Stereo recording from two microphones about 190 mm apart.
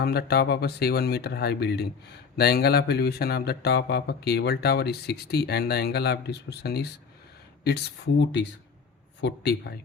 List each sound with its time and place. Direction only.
0.0 s speech: 55° left (ahead or behind)